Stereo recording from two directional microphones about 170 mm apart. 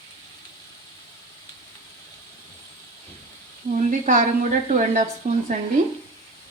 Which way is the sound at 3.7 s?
50° right (ahead or behind).